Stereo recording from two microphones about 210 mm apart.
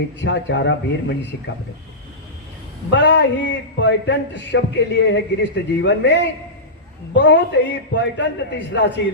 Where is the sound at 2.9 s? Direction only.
60° left (ahead or behind).